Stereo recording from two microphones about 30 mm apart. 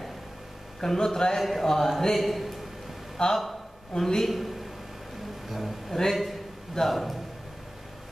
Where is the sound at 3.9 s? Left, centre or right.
Centre.